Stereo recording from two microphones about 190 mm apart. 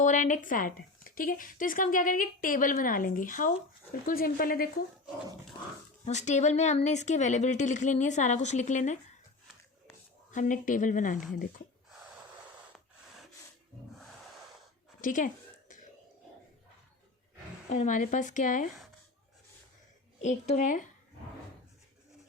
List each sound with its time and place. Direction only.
0.0 s speech: 40° left (ahead or behind)
6.1 s speech: 40° left (ahead or behind)
10.3 s speech: 40° left (ahead or behind)
11.9 s snort: 5° right (ahead or behind)
15.0 s speech: 45° left (ahead or behind)
17.7 s speech: 40° left (ahead or behind)
20.2 s speech: 40° left (ahead or behind)